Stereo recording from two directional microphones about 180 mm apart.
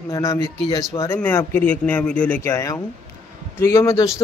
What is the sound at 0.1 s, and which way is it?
Speech, 15° left (ahead or behind).